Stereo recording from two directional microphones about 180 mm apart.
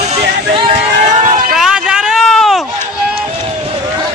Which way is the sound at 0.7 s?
45° right (ahead or behind).